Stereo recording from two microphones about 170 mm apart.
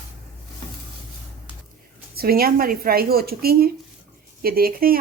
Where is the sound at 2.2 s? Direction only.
60° right (ahead or behind).